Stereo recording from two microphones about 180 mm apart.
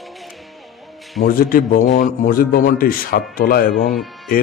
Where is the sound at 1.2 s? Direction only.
55° left (ahead or behind).